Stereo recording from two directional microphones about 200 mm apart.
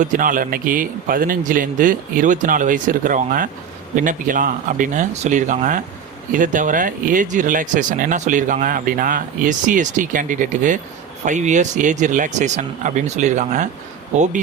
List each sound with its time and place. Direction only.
0.0 s a man's voice: 40° right (ahead or behind)